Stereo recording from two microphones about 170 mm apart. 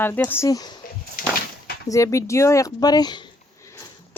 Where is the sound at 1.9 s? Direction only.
20° left (ahead or behind).